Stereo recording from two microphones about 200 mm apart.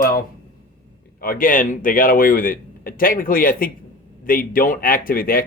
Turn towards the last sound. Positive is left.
turn(degrees=45)  # may be behind; listen again after turning